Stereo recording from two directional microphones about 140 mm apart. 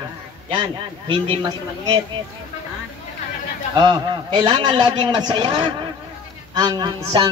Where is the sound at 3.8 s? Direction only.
30° right (ahead or behind).